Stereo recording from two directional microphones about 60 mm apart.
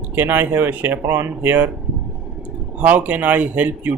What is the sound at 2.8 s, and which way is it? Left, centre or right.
Speech, right.